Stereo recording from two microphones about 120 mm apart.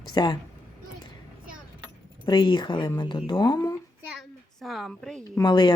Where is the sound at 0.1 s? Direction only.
35° left (ahead or behind).